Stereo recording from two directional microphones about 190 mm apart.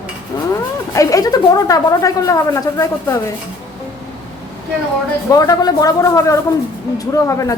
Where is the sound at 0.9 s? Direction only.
20° left (ahead or behind).